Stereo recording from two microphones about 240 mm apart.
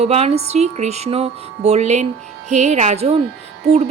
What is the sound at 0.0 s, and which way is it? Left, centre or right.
Speech, right.